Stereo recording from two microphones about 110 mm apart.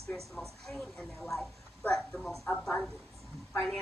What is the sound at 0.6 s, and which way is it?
Speech, 5° left (ahead or behind).